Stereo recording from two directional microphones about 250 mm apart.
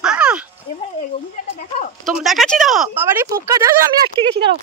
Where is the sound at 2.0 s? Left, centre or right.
Centre.